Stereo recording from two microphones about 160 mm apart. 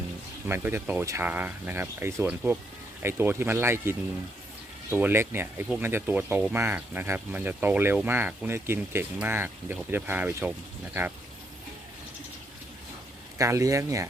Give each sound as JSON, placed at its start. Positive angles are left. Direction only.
{"t": 0.4, "sound": "speech", "side_deg": -15}
{"t": 13.4, "sound": "speech", "side_deg": -20}